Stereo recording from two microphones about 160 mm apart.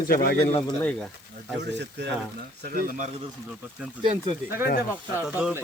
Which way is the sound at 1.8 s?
90° right.